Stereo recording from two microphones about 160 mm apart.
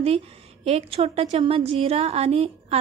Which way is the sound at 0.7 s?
40° right (ahead or behind).